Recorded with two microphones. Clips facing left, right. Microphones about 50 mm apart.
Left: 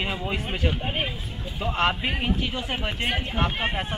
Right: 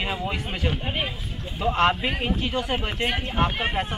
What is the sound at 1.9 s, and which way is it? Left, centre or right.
Speech, centre.